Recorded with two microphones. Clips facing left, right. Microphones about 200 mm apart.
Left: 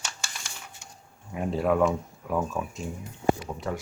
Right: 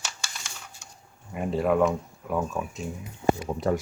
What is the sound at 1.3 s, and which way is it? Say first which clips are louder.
Speech: right 1 dB; centre (ahead or behind).